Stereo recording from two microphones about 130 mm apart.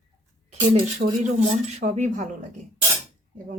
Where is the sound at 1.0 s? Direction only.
90° right.